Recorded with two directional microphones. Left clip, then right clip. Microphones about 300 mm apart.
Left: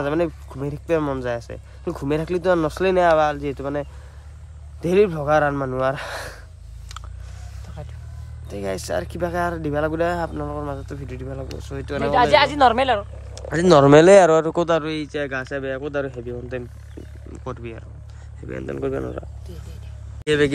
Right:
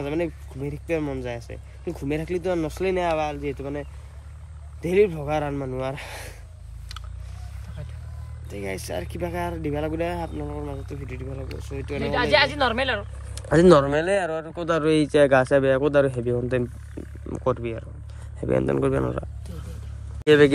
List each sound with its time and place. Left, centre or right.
0.0 s speech: centre
4.8 s speech: centre
8.5 s speech: centre
12.0 s speech: left
13.3 s speech: centre
20.2 s speech: centre